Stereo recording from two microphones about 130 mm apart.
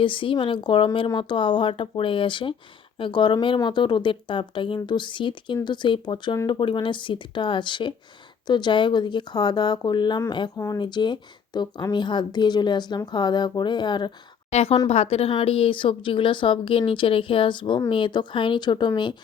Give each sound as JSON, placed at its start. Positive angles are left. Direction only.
{"t": 0.0, "sound": "a woman's voice", "side_deg": 40}
{"t": 14.5, "sound": "a woman's voice", "side_deg": 50}